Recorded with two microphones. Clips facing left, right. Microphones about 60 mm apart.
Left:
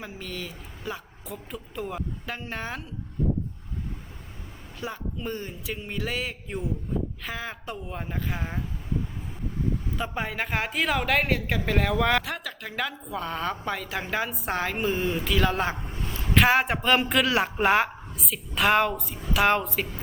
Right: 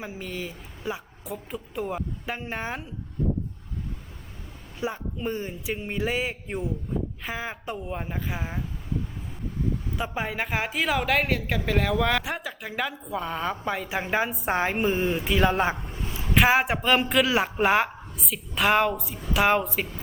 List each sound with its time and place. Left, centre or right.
0.0 s a woman's voice: centre
4.8 s a woman's voice: centre
7.6 s speech: centre
10.0 s speech: centre
12.2 s a woman's voice: centre
14.4 s speech: right
15.7 s a sound: centre
16.3 s speech: centre